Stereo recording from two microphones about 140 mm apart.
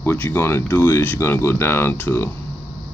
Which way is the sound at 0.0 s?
15° left (ahead or behind).